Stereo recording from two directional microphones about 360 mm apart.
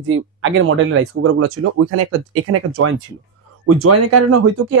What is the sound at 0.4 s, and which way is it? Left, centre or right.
Speech, right.